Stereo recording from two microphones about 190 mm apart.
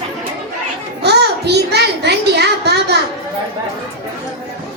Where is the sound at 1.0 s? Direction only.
60° right (ahead or behind).